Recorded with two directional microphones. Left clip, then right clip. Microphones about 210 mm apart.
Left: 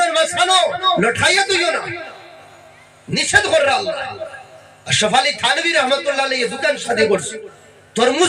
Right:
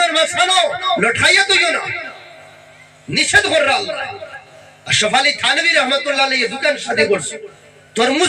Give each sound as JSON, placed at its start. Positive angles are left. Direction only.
{"t": 0.0, "sound": "a man's voice", "side_deg": 20}
{"t": 3.1, "sound": "a man's voice", "side_deg": 20}